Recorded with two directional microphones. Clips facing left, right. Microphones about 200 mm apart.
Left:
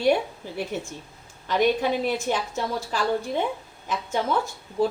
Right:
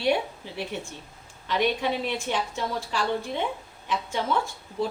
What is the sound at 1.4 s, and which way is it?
A woman's voice, 45° left (ahead or behind).